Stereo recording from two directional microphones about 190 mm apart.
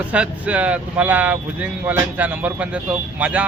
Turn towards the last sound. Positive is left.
turn(degrees=-5)  # may be behind; listen again after turning